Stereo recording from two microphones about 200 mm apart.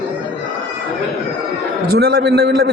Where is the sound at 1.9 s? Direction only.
50° right (ahead or behind).